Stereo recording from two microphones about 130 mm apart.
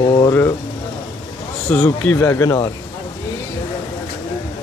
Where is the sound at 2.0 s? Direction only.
20° left (ahead or behind).